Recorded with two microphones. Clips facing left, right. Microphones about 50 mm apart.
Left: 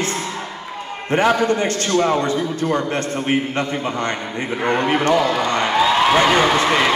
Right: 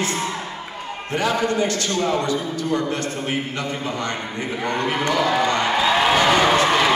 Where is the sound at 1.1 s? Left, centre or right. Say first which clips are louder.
Left 5 dB; left.